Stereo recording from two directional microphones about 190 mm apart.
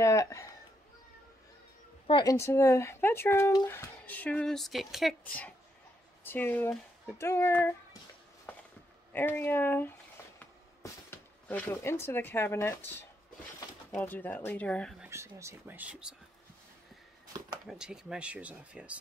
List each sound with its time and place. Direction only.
0.0 s speech: 15° left (ahead or behind)
2.0 s speech: 25° left (ahead or behind)
8.5 s walk: 5° left (ahead or behind)
9.1 s speech: 10° left (ahead or behind)
13.9 s speech: 10° left (ahead or behind)
15.0 s speech: 15° right (ahead or behind)
17.6 s speech: 5° right (ahead or behind)